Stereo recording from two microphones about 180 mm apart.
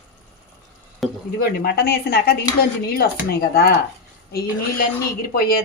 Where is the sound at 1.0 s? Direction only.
Centre (ahead or behind).